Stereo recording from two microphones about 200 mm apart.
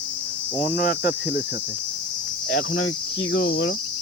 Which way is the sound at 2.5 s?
80° left.